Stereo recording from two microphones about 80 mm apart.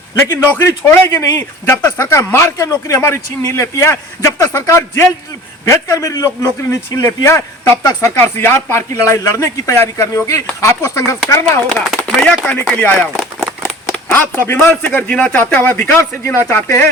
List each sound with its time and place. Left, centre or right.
0.2 s speech: left
12.2 s a man's voice: centre
13.0 s a sound: centre
14.1 s a man's voice: left